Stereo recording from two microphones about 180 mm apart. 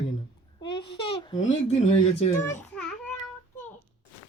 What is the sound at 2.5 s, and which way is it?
Baby cry, 10° left (ahead or behind).